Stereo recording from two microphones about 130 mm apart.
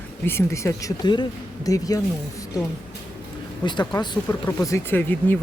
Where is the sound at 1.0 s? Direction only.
35° left (ahead or behind).